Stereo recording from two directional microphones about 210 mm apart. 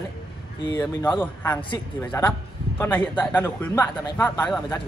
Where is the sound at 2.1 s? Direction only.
10° left (ahead or behind).